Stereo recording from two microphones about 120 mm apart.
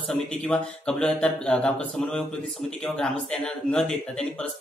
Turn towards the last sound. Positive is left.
turn(degrees=5)  # may be behind; listen again after turning